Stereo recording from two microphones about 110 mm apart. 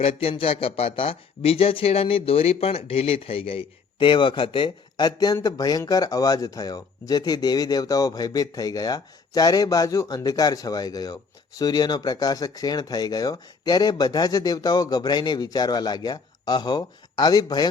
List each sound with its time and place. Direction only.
0.0 s speech: 60° left (ahead or behind); by 17.7 s 40° left (ahead or behind)